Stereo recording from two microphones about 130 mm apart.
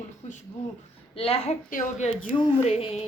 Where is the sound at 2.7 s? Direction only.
55° left (ahead or behind).